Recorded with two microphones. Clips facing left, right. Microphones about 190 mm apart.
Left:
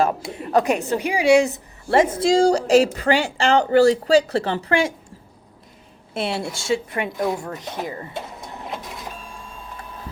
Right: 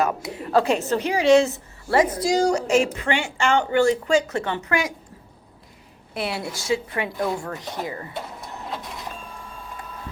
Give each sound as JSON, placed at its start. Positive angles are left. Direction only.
{"t": 0.0, "sound": "a woman's voice", "side_deg": 25}
{"t": 6.1, "sound": "a woman's voice", "side_deg": 25}